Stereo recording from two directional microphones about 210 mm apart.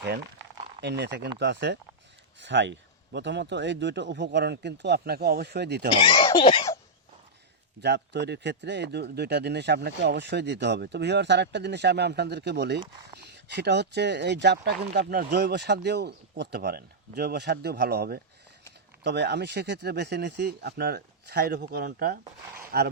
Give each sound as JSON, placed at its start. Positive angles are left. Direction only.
{"t": 0.8, "sound": "a man's voice", "side_deg": -55}
{"t": 5.9, "sound": "speech", "side_deg": 25}
{"t": 7.8, "sound": "speech", "side_deg": -55}